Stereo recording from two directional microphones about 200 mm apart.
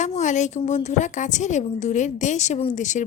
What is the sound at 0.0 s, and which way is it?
A woman's voice, 35° left (ahead or behind).